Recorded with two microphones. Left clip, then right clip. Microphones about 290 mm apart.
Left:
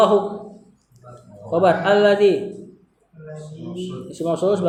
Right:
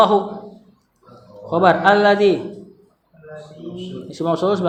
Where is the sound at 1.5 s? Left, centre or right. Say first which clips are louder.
Right 3 dB; right.